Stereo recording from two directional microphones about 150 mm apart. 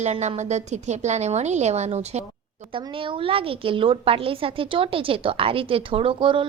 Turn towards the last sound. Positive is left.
turn(degrees=-35)  # may be behind; listen again after turning